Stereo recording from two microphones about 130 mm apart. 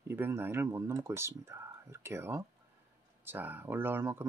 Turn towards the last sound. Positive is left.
turn(degrees=-20)  # may be behind; listen again after turning